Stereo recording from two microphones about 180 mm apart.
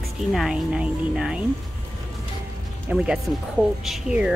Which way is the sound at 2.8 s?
5° right (ahead or behind).